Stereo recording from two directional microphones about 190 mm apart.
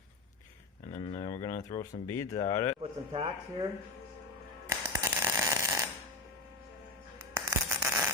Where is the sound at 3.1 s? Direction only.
30° right (ahead or behind).